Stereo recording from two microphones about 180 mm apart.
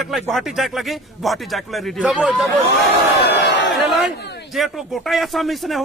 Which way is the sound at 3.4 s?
75° left (ahead or behind).